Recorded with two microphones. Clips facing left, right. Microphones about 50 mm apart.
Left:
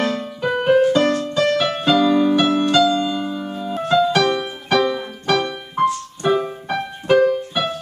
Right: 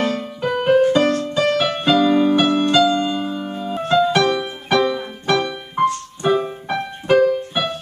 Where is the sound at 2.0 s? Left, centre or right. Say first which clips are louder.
Even; centre.